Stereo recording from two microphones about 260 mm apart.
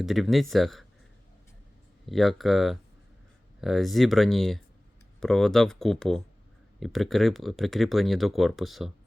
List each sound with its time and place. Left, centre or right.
0.0 s speech: centre
2.0 s speech: centre